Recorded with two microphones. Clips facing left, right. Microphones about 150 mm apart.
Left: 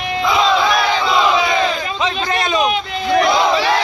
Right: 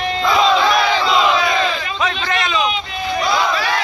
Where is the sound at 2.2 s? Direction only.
40° left (ahead or behind).